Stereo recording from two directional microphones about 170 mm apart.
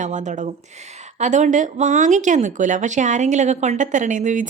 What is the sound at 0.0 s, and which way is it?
Speech, 45° right (ahead or behind).